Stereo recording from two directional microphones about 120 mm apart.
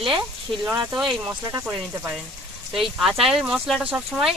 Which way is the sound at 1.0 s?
5° right (ahead or behind).